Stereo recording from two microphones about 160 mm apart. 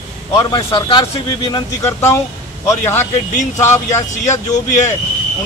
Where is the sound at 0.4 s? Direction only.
25° left (ahead or behind).